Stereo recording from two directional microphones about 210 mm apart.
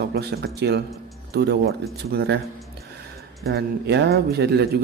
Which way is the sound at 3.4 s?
50° right (ahead or behind).